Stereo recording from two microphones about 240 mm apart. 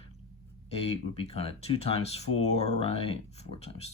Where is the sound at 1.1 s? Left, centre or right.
Left.